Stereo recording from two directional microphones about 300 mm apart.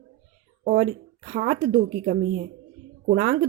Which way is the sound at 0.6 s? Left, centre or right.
Right.